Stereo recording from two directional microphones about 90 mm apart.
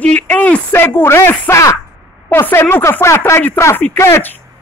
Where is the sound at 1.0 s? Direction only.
30° left (ahead or behind).